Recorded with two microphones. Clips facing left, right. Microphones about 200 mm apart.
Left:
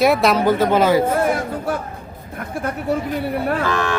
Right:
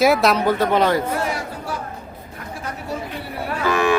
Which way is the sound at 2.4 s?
55° left (ahead or behind).